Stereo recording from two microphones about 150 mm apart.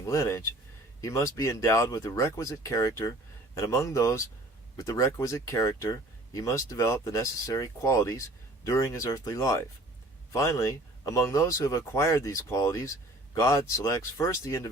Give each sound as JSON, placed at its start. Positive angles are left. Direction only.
{"t": 0.0, "sound": "speech", "side_deg": 20}